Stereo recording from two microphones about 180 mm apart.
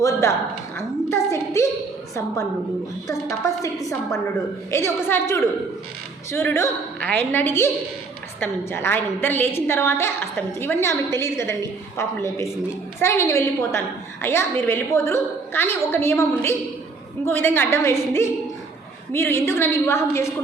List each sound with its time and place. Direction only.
0.0 s a woman's voice: 15° left (ahead or behind)
3.1 s a woman's voice: 15° left (ahead or behind)